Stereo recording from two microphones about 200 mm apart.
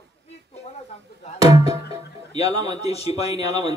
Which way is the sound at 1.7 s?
15° right (ahead or behind).